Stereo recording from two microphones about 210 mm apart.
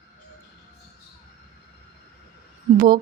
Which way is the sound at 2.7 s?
40° right (ahead or behind).